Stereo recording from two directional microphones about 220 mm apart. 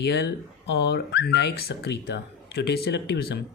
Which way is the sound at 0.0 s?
50° left (ahead or behind).